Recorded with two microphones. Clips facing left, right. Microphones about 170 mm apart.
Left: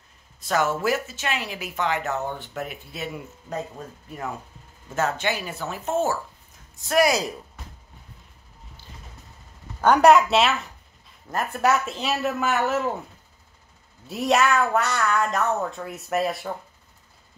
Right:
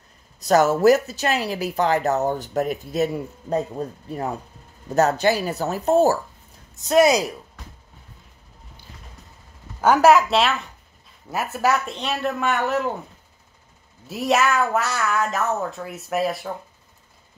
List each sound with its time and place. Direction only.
0.4 s speech: 40° right (ahead or behind)
6.7 s speech: 20° right (ahead or behind)
9.8 s a woman's voice: 5° right (ahead or behind)
14.0 s a woman's voice: centre (ahead or behind)